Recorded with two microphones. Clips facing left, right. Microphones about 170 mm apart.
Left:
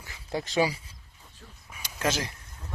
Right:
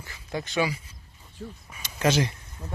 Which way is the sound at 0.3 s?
30° left (ahead or behind).